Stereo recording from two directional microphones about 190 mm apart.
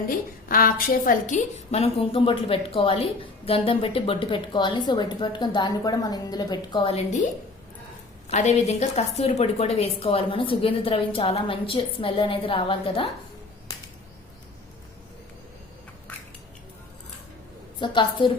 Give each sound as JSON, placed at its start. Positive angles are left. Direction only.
{"t": 0.4, "sound": "a woman's voice", "side_deg": 50}
{"t": 8.3, "sound": "a woman's voice", "side_deg": 35}
{"t": 17.7, "sound": "a woman's voice", "side_deg": 25}